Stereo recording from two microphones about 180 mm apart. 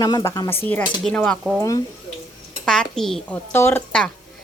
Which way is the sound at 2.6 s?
5° left (ahead or behind).